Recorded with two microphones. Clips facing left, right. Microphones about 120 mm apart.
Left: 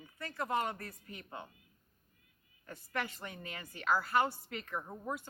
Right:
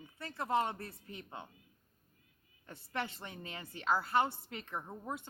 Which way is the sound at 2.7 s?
25° right (ahead or behind).